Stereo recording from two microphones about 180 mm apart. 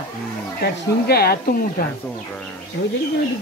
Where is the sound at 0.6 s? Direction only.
60° left (ahead or behind).